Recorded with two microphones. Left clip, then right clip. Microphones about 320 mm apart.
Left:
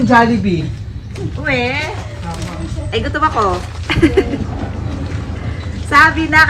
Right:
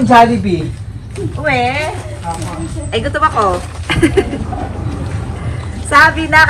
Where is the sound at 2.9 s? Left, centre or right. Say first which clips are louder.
Right 2 dB; centre.